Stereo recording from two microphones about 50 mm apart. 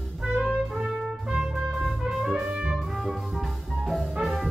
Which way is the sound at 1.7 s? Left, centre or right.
Centre.